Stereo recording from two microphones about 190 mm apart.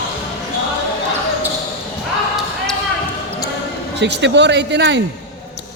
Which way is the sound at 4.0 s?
65° right (ahead or behind).